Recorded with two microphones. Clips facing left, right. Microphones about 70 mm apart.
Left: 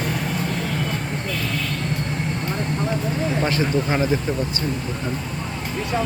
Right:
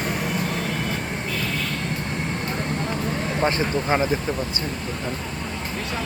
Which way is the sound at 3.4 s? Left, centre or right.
Right.